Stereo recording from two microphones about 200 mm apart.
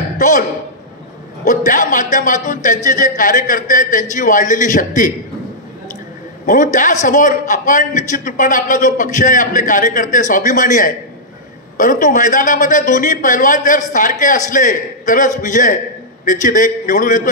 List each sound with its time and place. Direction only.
0.2 s a man's voice: 40° left (ahead or behind)
6.4 s a man's voice: 40° left (ahead or behind)